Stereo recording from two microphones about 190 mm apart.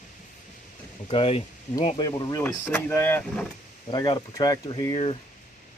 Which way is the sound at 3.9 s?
20° left (ahead or behind).